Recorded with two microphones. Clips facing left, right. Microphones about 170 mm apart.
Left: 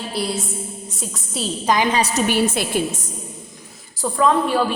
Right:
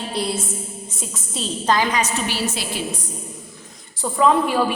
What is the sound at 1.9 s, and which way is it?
Speech, 35° left (ahead or behind).